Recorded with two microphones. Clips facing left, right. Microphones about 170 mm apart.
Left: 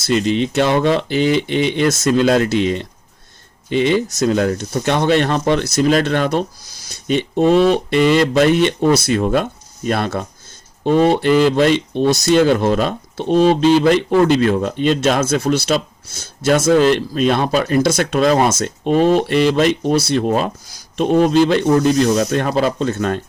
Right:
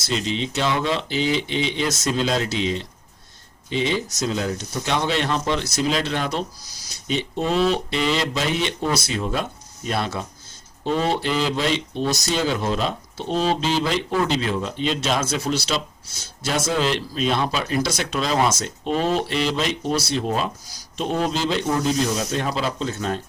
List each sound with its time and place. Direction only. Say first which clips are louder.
0.1 s speech: left 9 dB; 60° left (ahead or behind)